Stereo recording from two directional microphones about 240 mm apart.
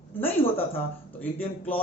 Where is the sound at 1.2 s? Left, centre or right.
Centre.